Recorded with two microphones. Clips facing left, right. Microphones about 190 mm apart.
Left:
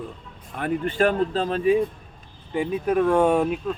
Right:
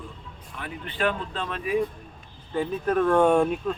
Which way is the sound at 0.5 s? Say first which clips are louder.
Left 10 dB; 50° left (ahead or behind).